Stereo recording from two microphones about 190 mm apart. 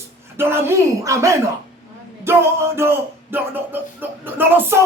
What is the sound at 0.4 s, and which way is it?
A man's voice, 10° right (ahead or behind).